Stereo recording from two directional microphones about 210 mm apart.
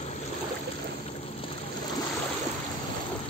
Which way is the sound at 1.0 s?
25° left (ahead or behind).